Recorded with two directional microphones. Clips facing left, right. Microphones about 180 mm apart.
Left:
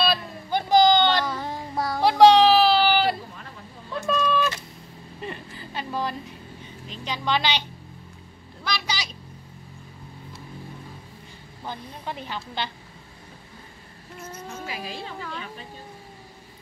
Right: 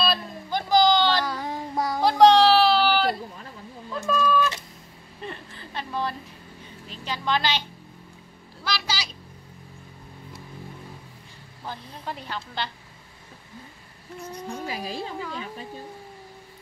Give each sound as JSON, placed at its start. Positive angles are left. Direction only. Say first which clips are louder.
{"t": 0.0, "sound": "a sound", "louder": "left 1 dB", "side_deg": 0}
{"t": 1.3, "sound": "child singing", "louder": "right 1 dB", "side_deg": -15}
{"t": 2.0, "sound": "a sound", "louder": "left 1 dB", "side_deg": 5}
{"t": 6.9, "sound": "a woman's voice", "louder": "left 1 dB", "side_deg": 0}
{"t": 8.6, "sound": "a sound", "louder": "even", "side_deg": -5}
{"t": 11.6, "sound": "a woman's voice", "louder": "left 1 dB", "side_deg": 0}
{"t": 14.2, "sound": "speech", "louder": "right 3 dB", "side_deg": -15}
{"t": 14.7, "sound": "a woman's voice", "louder": "right 2 dB", "side_deg": -40}
{"t": 15.1, "sound": "speech", "louder": "right 2 dB", "side_deg": -10}